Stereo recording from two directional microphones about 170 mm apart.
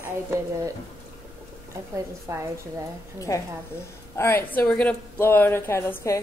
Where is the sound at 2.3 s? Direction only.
20° right (ahead or behind).